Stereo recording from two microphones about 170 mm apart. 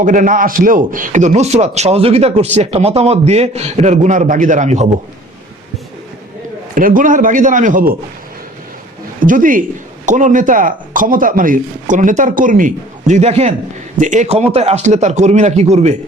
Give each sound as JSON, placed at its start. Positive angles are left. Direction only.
{"t": 0.0, "sound": "a man's voice", "side_deg": -50}
{"t": 6.7, "sound": "speech", "side_deg": -55}
{"t": 9.2, "sound": "speech", "side_deg": -50}